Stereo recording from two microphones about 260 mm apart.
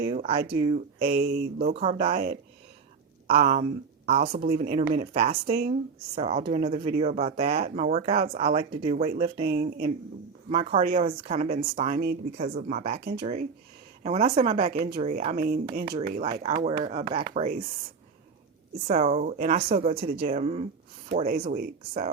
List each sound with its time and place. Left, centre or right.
0.0 s speech: right
1.0 s speech: right
1.7 s speech: right
4.2 s speech: right
10.5 s speech: right
18.9 s speech: right